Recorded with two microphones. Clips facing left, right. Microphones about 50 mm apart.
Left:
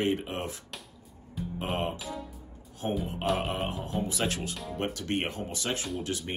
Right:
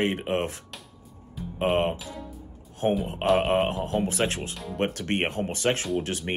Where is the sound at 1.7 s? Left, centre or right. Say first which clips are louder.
Right 6 dB; right.